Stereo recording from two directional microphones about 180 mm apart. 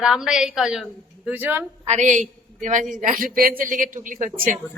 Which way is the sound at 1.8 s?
40° right (ahead or behind).